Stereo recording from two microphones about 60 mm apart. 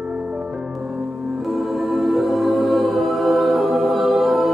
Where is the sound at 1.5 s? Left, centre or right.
Centre.